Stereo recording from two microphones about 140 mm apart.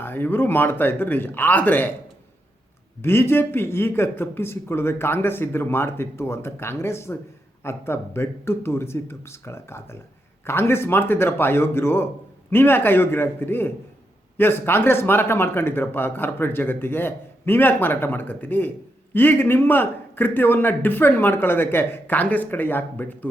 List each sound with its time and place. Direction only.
0.0 s speech: 15° left (ahead or behind)
3.0 s speech: 15° left (ahead or behind)